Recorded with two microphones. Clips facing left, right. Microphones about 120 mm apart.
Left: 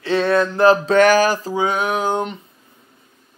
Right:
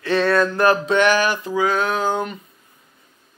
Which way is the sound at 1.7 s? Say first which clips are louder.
Left 1 dB; 15° left (ahead or behind).